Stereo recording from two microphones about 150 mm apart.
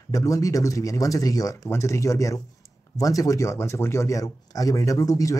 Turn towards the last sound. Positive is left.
turn(degrees=20)  # may be behind; listen again after turning